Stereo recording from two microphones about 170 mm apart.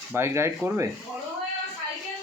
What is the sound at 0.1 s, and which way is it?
Speech, 15° right (ahead or behind).